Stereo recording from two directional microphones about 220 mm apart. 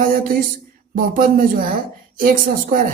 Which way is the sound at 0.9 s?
40° right (ahead or behind).